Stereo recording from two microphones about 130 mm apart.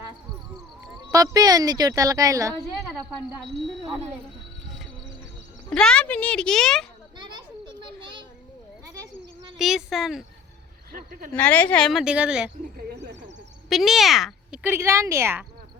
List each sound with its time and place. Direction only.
1.1 s a woman's voice: 25° right (ahead or behind)
3.4 s a woman's voice: 5° left (ahead or behind)
5.7 s speech: 5° left (ahead or behind)
7.2 s children playing: 35° right (ahead or behind)
9.6 s a woman's voice: centre (ahead or behind)
10.9 s speech: 90° right
11.3 s a woman's voice: 10° left (ahead or behind); by 12.5 s 10° right (ahead or behind)
13.7 s speech: centre (ahead or behind)
14.6 s a woman's voice: 20° right (ahead or behind)